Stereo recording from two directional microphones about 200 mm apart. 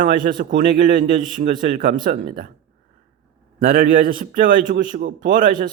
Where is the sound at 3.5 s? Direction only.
45° right (ahead or behind).